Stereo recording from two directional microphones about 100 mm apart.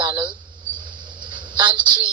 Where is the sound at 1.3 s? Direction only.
50° right (ahead or behind).